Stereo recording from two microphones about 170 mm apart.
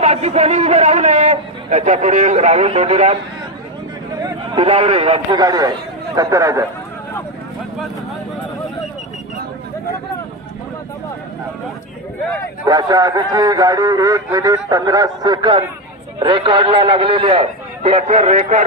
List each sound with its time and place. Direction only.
0.0 s a man's voice: 40° right (ahead or behind)
4.2 s a man's voice: 35° right (ahead or behind)
5.3 s a man's voice: 20° right (ahead or behind)
12.6 s a man's voice: 20° right (ahead or behind); by 18.6 s 40° right (ahead or behind)